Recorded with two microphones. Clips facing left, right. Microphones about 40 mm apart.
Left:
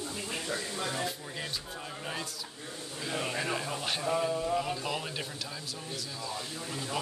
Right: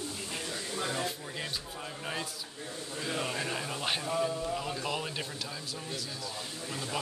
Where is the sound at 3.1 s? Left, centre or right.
Centre.